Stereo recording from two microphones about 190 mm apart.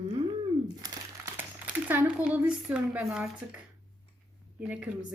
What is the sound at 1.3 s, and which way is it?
Speech, 10° right (ahead or behind).